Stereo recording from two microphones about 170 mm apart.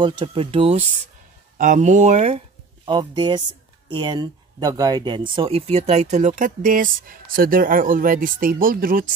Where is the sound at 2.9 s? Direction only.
25° right (ahead or behind).